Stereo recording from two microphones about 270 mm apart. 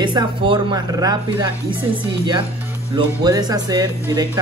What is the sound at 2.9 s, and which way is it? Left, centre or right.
Speech, centre.